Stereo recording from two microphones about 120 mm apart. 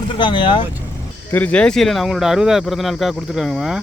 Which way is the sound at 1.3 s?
15° left (ahead or behind).